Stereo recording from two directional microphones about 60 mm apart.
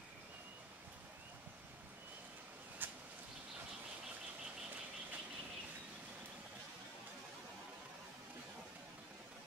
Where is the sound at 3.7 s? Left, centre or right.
Centre.